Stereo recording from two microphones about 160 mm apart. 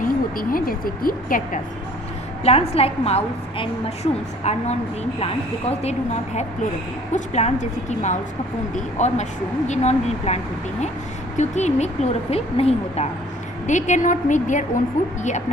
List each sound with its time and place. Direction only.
0.0 s speech: 60° left (ahead or behind)
2.4 s a woman's voice: 40° left (ahead or behind)